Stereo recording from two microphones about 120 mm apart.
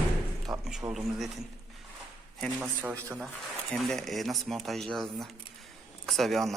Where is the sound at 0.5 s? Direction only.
30° right (ahead or behind).